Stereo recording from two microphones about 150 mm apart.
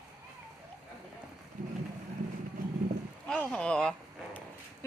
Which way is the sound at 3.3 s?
5° left (ahead or behind).